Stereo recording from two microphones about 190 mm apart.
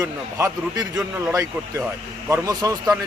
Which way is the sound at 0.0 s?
15° right (ahead or behind).